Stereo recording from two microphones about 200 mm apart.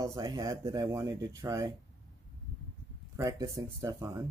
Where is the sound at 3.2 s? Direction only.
15° right (ahead or behind).